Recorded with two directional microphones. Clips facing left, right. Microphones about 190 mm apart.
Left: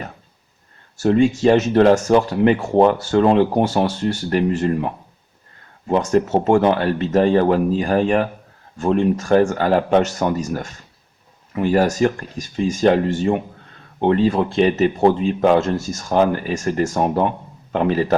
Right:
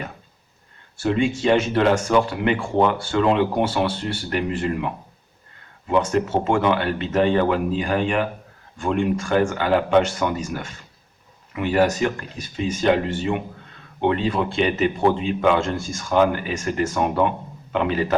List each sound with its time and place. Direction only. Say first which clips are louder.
0.9 s speech: left 6 dB; 40° left (ahead or behind)
5.9 s speech: left 3 dB; 40° left (ahead or behind)